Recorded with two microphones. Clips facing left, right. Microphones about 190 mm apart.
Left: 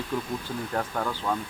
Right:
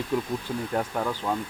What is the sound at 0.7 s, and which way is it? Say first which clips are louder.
Speech: right 2 dB; 15° right (ahead or behind).